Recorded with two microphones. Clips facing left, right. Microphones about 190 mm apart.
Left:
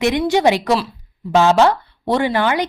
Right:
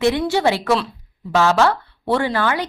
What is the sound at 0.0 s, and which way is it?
A woman's voice, 15° left (ahead or behind).